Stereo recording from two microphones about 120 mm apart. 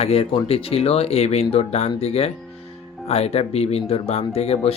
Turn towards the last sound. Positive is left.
turn(degrees=60)  # may be behind; listen again after turning